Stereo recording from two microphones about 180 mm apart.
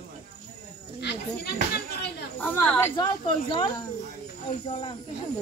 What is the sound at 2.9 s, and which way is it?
Speech, 25° left (ahead or behind).